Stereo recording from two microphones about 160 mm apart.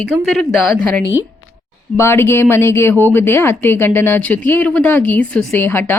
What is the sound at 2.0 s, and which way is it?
A woman's voice, 15° left (ahead or behind).